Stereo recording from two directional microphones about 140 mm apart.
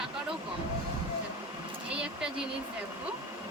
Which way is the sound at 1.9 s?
5° right (ahead or behind).